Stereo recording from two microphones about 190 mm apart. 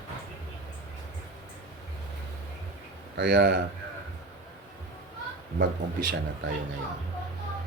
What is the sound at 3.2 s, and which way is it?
Speech, 65° right (ahead or behind).